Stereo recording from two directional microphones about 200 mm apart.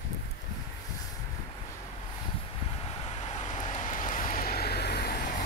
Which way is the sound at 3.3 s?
40° left (ahead or behind).